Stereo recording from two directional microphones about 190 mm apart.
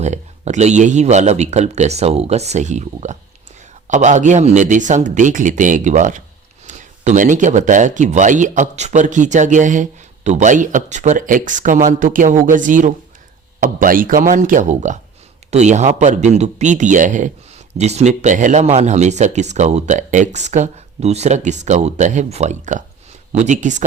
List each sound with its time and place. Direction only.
0.0 s speech: 35° right (ahead or behind)